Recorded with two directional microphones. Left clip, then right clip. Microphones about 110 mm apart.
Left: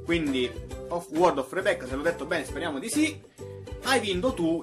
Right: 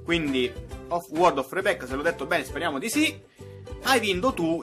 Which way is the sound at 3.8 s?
35° right (ahead or behind).